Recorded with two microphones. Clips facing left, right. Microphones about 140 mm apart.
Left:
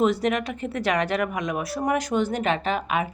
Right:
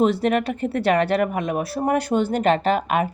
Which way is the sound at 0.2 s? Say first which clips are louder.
Right 4 dB; 50° right (ahead or behind).